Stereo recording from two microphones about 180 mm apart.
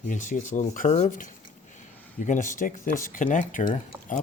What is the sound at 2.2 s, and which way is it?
Speech, 45° left (ahead or behind).